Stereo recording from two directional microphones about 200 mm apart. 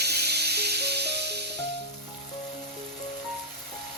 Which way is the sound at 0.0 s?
55° right (ahead or behind).